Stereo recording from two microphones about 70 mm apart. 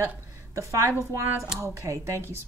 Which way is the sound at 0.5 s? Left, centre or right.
Right.